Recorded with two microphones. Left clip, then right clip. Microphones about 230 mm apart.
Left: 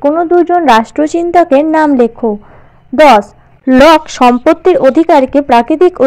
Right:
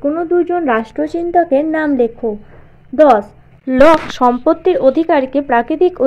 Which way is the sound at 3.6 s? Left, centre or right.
Left.